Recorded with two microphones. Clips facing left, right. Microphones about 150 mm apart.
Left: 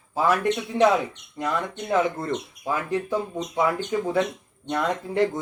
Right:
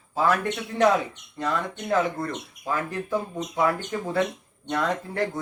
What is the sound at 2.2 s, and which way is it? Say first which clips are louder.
Speech: left 3 dB; 20° left (ahead or behind).